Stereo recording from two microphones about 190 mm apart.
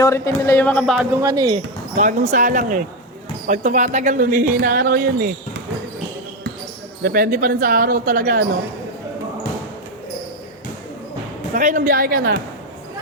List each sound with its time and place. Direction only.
0.0 s speech: 15° left (ahead or behind)
1.2 s speech: 20° right (ahead or behind)
2.0 s speech: 40° right (ahead or behind)
7.0 s speech: 50° right (ahead or behind)
11.5 s speech: 45° right (ahead or behind)